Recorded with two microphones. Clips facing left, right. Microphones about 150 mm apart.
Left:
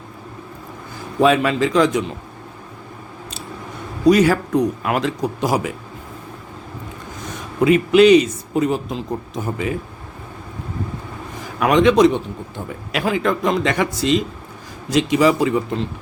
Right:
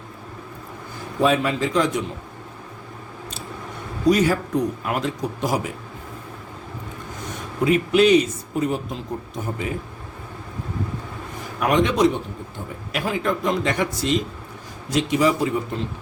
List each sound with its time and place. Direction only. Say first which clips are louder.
1.2 s speech: left 4 dB; 80° left
4.1 s speech: left 4 dB; 85° left
7.6 s speech: left 5 dB; 90° left
11.6 s speech: left 5 dB; 90° left